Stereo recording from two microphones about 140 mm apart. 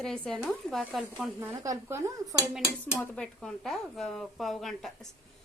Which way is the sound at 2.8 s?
15° left (ahead or behind).